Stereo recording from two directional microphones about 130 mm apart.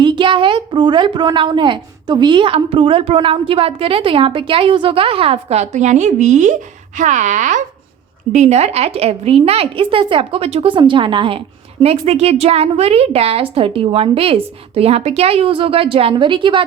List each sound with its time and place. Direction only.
0.0 s a woman's voice: 35° right (ahead or behind); by 7.6 s 70° right (ahead or behind)
8.3 s a woman's voice: 60° right (ahead or behind); by 16.6 s 40° right (ahead or behind)